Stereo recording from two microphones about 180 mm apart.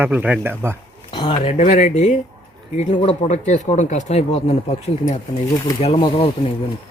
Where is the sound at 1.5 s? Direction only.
40° left (ahead or behind).